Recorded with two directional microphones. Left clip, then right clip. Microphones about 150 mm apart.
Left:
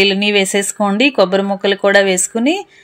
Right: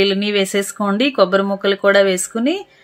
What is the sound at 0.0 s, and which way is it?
A woman's voice, 15° left (ahead or behind).